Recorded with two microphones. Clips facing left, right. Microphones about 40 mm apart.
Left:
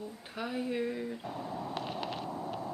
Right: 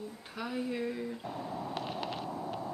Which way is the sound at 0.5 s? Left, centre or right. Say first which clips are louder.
Left 1 dB; centre.